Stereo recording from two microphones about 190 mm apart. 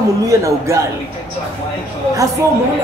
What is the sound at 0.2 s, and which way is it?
Speech, 15° right (ahead or behind).